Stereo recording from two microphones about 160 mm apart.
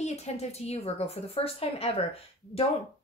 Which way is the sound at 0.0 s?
45° left (ahead or behind).